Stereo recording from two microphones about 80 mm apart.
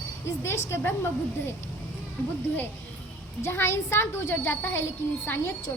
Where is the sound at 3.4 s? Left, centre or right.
Left.